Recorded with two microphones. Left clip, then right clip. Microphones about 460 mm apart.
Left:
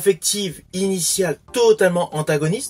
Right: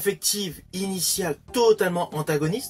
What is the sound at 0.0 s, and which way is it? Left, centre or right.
Speech, right.